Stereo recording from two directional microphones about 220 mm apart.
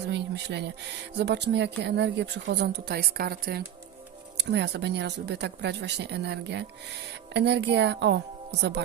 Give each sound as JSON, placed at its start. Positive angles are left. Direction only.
{"t": 0.0, "sound": "speech", "side_deg": -50}